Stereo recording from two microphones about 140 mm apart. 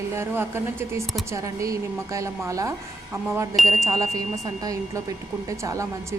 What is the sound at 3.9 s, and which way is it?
Speech, 25° right (ahead or behind).